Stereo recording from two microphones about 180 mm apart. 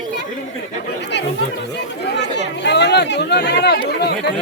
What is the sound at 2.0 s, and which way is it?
Chatter, 75° left (ahead or behind).